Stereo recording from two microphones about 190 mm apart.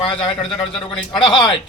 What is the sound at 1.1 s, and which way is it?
Speech, 25° left (ahead or behind).